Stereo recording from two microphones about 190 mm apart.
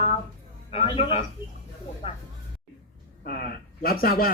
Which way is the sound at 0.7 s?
30° left (ahead or behind).